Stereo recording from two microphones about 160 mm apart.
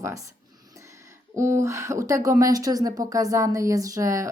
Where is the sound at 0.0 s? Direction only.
20° right (ahead or behind).